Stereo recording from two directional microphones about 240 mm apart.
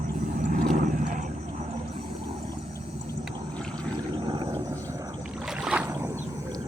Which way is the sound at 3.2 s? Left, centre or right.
Centre.